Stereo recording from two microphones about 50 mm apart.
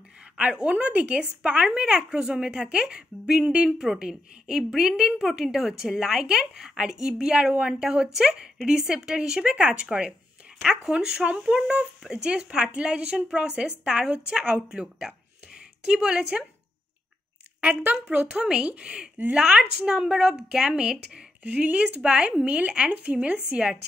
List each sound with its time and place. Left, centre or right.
0.4 s speech: right
3.7 s a woman's voice: centre
17.6 s speech: right
21.4 s speech: right
21.8 s speech: centre